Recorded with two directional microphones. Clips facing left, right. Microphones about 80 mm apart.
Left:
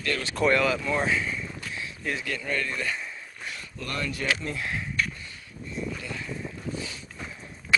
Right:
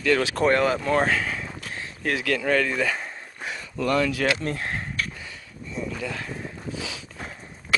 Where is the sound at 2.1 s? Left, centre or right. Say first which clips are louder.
Right 9 dB; right.